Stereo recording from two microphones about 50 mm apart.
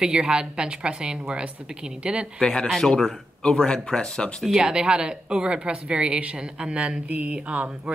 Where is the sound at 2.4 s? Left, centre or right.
Centre.